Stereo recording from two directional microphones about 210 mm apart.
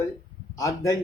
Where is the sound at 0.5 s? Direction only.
15° left (ahead or behind).